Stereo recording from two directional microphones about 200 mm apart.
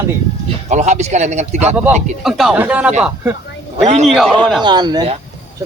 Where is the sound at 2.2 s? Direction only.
Centre (ahead or behind).